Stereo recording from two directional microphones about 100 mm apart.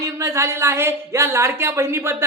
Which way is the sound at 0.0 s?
30° right (ahead or behind).